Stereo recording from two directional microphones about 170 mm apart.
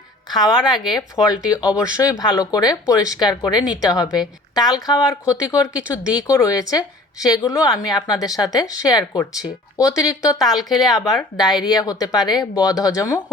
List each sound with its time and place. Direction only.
0.3 s speech: 25° left (ahead or behind)
1.6 s speech: 5° right (ahead or behind)
2.0 s speech: 20° left (ahead or behind)
10.6 s speech: centre (ahead or behind)
10.8 s speech: 20° left (ahead or behind)